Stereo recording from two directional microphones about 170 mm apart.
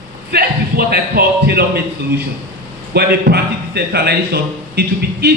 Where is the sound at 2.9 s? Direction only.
70° right (ahead or behind).